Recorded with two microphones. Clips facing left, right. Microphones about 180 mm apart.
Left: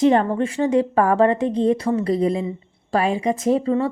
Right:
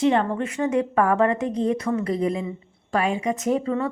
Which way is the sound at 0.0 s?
40° left (ahead or behind).